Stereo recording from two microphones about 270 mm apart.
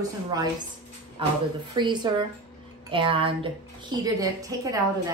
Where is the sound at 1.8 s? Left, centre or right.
Centre.